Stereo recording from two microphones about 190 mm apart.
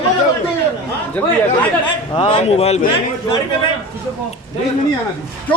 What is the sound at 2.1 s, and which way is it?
Speech, 25° left (ahead or behind).